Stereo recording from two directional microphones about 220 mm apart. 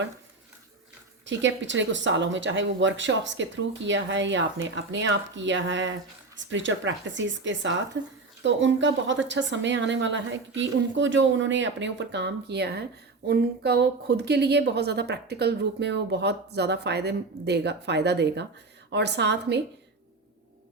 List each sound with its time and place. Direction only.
1.2 s a woman's voice: 55° right (ahead or behind)